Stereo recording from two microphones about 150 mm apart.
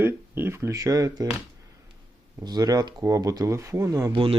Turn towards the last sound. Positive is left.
turn(degrees=-35)  # may be behind; listen again after turning